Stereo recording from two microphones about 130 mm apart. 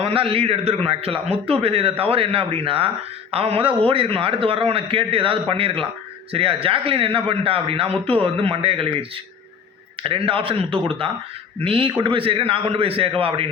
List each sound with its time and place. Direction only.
0.0 s a man's voice: 45° right (ahead or behind)